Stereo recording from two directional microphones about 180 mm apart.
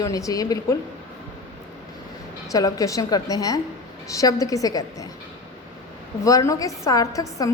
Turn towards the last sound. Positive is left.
turn(degrees=20)  # may be behind; listen again after turning